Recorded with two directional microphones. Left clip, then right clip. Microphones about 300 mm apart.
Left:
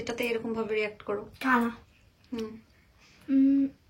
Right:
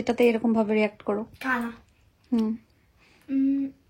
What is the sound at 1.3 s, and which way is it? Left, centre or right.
Speech, centre.